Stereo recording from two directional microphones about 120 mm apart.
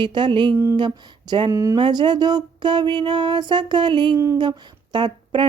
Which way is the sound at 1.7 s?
40° right (ahead or behind).